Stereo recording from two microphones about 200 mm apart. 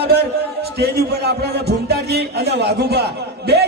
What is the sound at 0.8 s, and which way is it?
A man's voice, 55° right (ahead or behind).